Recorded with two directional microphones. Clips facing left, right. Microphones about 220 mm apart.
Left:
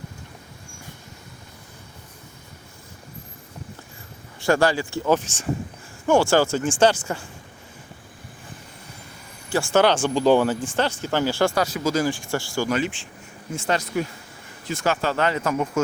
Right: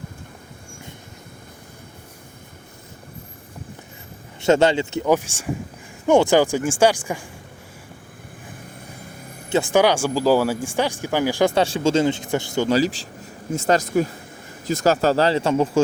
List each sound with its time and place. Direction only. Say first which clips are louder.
4.4 s speech: right 3 dB; 20° right (ahead or behind)
9.7 s speech: even; 10° right (ahead or behind)
11.5 s speech: right 4 dB; 30° right (ahead or behind)
12.7 s speech: right 5 dB; 35° right (ahead or behind)